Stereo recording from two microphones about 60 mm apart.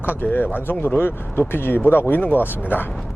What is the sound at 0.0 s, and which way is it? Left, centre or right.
Speech, left.